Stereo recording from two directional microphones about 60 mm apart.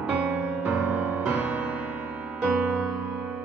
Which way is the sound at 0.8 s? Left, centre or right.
Right.